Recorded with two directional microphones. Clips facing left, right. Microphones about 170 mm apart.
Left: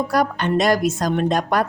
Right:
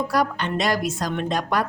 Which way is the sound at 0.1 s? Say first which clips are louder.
Left 4 dB; 45° left (ahead or behind).